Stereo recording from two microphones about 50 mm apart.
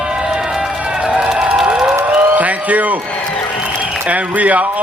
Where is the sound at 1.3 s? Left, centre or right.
Centre.